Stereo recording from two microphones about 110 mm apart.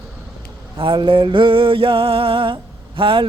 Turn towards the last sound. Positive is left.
turn(degrees=-50)  # may be behind; listen again after turning